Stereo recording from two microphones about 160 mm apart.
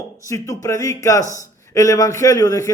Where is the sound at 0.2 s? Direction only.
20° left (ahead or behind).